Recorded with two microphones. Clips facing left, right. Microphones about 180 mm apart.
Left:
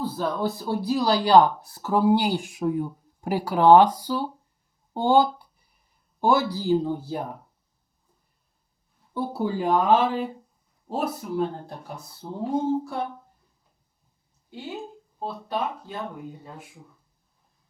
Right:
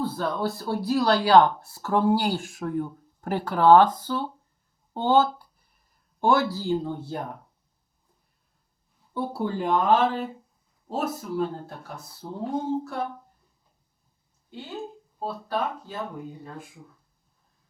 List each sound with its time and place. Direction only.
0.2 s speech: 5° left (ahead or behind)
6.9 s speech: 5° left (ahead or behind)
9.1 s speech: 5° left (ahead or behind)
14.5 s speech: 15° left (ahead or behind)
14.8 s a sound: centre (ahead or behind)
15.5 s speech: 5° left (ahead or behind)